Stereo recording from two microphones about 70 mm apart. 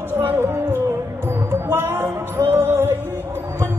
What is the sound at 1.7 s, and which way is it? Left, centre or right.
Music, right.